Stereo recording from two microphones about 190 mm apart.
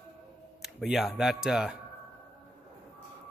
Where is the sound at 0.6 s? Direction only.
Centre (ahead or behind).